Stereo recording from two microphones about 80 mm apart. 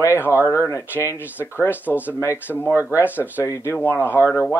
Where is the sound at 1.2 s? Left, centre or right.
Left.